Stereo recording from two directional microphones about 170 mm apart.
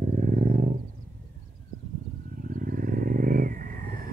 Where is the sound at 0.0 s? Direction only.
45° right (ahead or behind).